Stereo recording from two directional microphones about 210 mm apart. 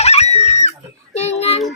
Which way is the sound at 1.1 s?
30° left (ahead or behind).